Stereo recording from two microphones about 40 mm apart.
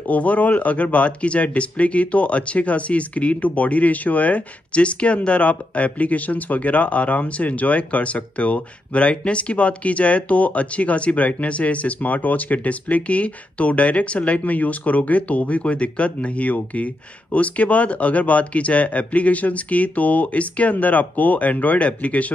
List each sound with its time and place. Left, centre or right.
0.0 s speech: left